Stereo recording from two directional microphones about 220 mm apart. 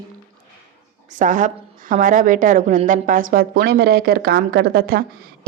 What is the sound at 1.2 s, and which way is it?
A woman's voice, 35° right (ahead or behind).